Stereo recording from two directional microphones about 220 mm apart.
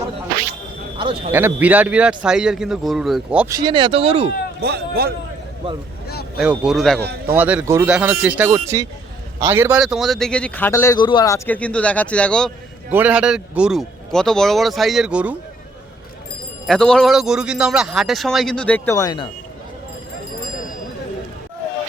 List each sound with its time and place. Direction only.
0.9 s a sound: 25° right (ahead or behind)
1.3 s a man's voice: 10° right (ahead or behind); by 4.3 s 25° right (ahead or behind)
4.6 s speech: 45° right (ahead or behind)
6.1 s a sound: 45° left (ahead or behind)
6.4 s speech: 5° right (ahead or behind)
7.0 s speech: 45° right (ahead or behind)
7.3 s a man's voice: 5° right (ahead or behind); by 11.3 s 20° left (ahead or behind)
11.4 s speech: 5° left (ahead or behind)
12.9 s speech: 5° right (ahead or behind)
16.6 s speech: 5° left (ahead or behind); by 19.3 s 20° left (ahead or behind)